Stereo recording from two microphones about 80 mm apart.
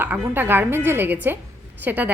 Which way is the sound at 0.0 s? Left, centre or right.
Right.